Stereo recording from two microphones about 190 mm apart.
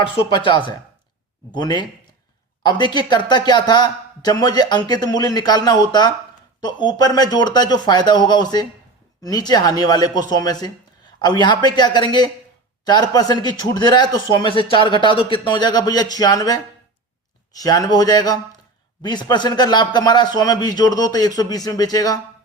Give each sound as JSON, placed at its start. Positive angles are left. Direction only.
{"t": 0.2, "sound": "a man's voice", "side_deg": 25}